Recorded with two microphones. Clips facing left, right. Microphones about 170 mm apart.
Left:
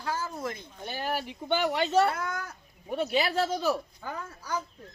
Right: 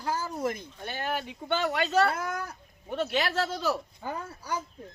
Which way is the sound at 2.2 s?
30° right (ahead or behind).